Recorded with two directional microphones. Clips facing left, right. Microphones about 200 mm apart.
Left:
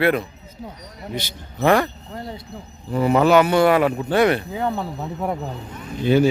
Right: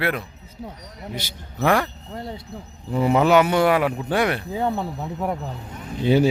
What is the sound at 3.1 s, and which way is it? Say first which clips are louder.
Speech: left 2 dB; 15° right (ahead or behind).